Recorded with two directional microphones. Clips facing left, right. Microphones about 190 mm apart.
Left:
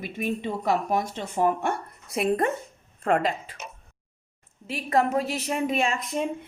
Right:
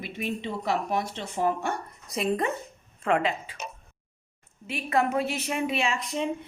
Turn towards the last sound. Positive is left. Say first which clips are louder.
# left 2 dB
turn(degrees=50)  # may be behind; listen again after turning